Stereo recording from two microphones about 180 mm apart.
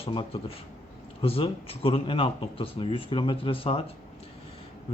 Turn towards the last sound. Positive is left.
turn(degrees=30)  # may be behind; listen again after turning